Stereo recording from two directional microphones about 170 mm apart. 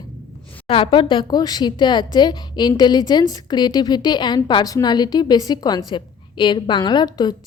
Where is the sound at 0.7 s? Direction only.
30° left (ahead or behind).